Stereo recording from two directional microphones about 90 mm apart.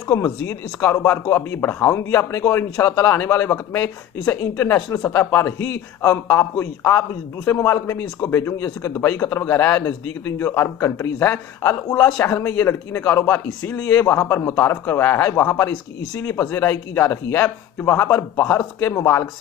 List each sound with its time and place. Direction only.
0.1 s speech: 25° left (ahead or behind)
8.5 s speech: 40° left (ahead or behind)
8.9 s speech: 25° left (ahead or behind)